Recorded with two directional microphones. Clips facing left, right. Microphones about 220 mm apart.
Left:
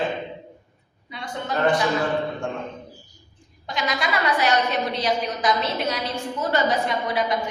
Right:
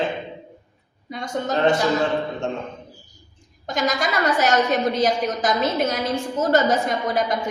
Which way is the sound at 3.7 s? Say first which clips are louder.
Right 3 dB; 45° right (ahead or behind).